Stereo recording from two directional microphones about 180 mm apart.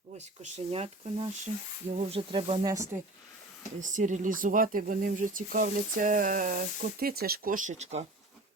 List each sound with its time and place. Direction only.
0.5 s speech: 35° right (ahead or behind)
2.6 s speech: 15° right (ahead or behind)
3.8 s speech: 45° right (ahead or behind)